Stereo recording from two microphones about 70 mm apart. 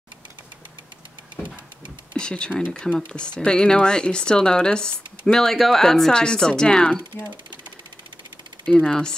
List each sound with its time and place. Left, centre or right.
2.1 s speech: centre
8.7 s speech: centre